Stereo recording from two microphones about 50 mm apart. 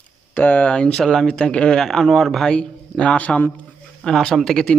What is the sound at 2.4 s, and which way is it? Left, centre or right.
Speech, centre.